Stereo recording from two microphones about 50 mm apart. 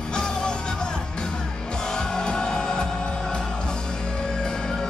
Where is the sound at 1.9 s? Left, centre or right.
Centre.